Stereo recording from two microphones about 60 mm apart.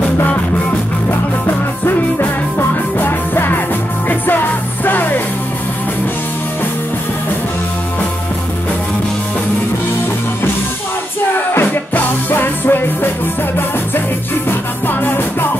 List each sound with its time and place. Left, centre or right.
3.0 s music: left
4.8 s music: left
11.3 s music: left
14.9 s music: left